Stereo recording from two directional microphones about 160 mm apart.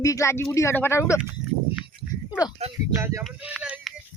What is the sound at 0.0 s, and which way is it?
Speech, 20° left (ahead or behind).